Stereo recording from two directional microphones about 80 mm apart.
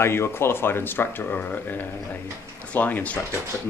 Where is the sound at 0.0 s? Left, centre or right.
Left.